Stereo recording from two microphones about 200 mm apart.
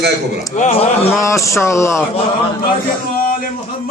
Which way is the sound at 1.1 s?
15° left (ahead or behind).